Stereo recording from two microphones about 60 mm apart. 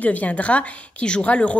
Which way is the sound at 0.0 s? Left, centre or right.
Left.